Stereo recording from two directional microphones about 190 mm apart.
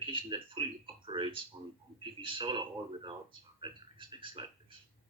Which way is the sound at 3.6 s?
25° right (ahead or behind).